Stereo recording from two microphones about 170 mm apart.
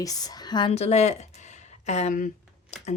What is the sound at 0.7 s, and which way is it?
Speech, 40° left (ahead or behind).